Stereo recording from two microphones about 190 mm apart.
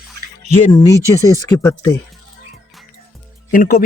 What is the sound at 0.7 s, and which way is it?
Speech, 20° left (ahead or behind).